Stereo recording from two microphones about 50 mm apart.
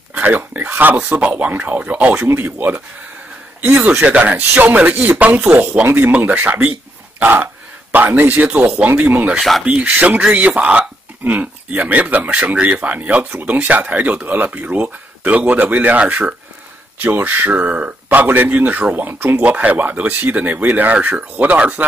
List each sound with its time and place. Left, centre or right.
0.1 s a sound: right
0.4 s speech: right
2.1 s speech: right
3.6 s speech: right
4.7 s speech: right
5.5 s speech: right
7.9 s speech: right
9.4 s speech: centre
9.7 s speech: right
17.0 s speech: right
17.5 s speech: right
19.1 s speech: right
19.4 s speech: right